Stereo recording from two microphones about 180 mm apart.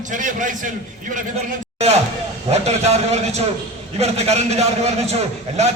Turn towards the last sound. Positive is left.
turn(degrees=-35)  # may be behind; listen again after turning